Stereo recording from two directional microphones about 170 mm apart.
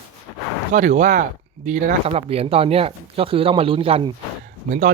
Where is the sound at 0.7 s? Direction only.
45° right (ahead or behind).